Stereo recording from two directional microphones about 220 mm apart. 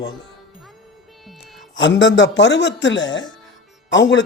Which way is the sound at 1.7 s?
55° left (ahead or behind).